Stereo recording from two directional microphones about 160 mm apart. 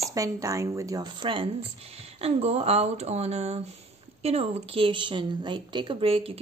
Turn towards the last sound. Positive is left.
turn(degrees=-35)  # may be behind; listen again after turning